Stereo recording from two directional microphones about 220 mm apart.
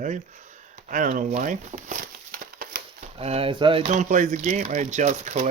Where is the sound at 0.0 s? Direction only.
35° right (ahead or behind).